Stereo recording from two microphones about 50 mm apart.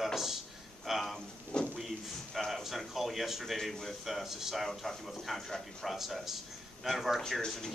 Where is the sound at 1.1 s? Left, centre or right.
Centre.